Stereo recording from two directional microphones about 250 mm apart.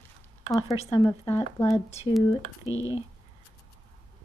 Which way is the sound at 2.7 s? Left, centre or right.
Centre.